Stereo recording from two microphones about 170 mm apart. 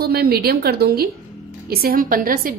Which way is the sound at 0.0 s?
65° right (ahead or behind).